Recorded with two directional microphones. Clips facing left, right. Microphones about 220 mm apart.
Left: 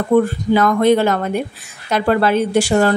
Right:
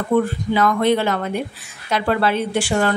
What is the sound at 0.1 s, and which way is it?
Speech, 45° left (ahead or behind).